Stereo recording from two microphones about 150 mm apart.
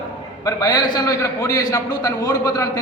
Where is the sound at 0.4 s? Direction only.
25° left (ahead or behind).